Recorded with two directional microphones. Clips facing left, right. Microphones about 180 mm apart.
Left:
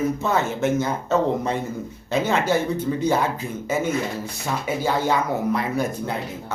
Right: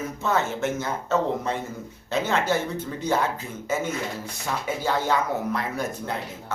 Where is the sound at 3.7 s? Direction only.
10° left (ahead or behind).